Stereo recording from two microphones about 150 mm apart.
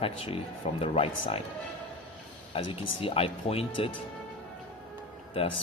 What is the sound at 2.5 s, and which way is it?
Speech, 35° left (ahead or behind).